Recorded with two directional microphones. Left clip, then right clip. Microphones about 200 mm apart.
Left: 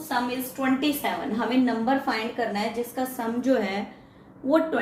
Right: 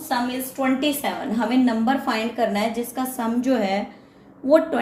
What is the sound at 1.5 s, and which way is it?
A woman's voice, 35° right (ahead or behind).